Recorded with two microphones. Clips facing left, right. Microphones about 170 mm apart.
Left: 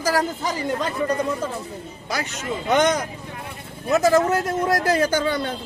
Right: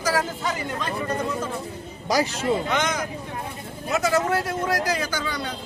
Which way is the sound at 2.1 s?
35° right (ahead or behind).